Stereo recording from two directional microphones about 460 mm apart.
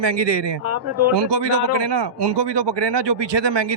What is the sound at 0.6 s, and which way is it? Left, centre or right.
Speech, right.